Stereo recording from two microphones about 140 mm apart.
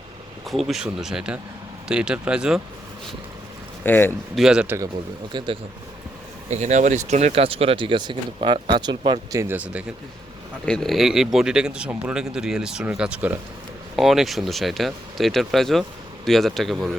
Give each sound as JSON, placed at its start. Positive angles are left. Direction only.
{"t": 0.4, "sound": "speech", "side_deg": 0}
{"t": 3.8, "sound": "speech", "side_deg": 15}
{"t": 4.4, "sound": "speech", "side_deg": -5}
{"t": 6.5, "sound": "speech", "side_deg": -55}
{"t": 9.3, "sound": "speech", "side_deg": -20}
{"t": 10.7, "sound": "speech", "side_deg": 0}